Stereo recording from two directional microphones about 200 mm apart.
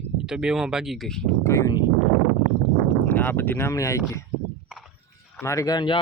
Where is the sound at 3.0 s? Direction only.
10° left (ahead or behind).